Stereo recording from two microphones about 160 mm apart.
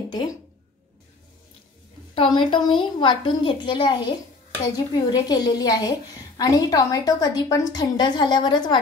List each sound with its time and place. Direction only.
0.1 s speech: 25° left (ahead or behind)
2.3 s a woman's voice: 30° left (ahead or behind)